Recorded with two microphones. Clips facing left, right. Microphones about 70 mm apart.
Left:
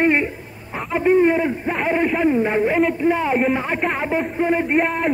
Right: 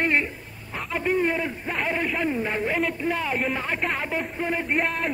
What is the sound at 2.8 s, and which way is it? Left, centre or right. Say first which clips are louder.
A man's voice: left 8 dB; centre.